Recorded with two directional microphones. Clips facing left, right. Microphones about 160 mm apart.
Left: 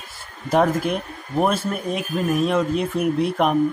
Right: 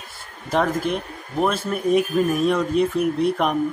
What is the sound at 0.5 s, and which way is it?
Speech, 10° left (ahead or behind).